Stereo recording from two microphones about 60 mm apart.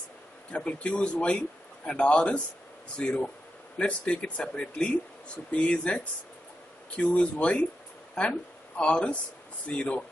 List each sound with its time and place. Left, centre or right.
0.5 s speech: centre